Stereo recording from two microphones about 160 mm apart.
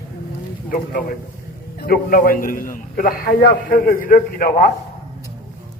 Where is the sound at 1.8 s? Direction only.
65° left (ahead or behind).